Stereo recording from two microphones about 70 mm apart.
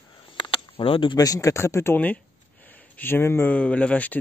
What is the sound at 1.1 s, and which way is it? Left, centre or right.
Speech, left.